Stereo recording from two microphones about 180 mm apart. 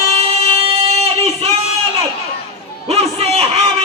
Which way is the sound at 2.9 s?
35° right (ahead or behind).